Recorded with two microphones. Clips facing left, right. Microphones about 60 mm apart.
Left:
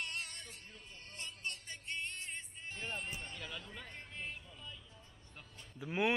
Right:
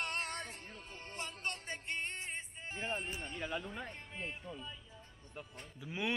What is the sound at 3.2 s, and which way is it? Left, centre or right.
Speech, centre.